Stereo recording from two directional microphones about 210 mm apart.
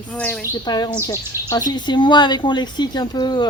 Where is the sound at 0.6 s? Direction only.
20° left (ahead or behind).